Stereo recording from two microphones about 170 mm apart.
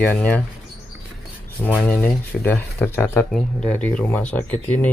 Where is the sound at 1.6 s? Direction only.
10° left (ahead or behind).